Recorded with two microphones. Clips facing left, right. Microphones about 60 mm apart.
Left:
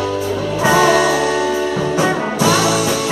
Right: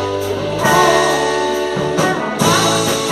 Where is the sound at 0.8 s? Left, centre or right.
Centre.